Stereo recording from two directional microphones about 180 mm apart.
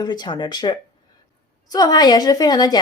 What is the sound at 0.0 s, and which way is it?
A woman's voice, 20° left (ahead or behind).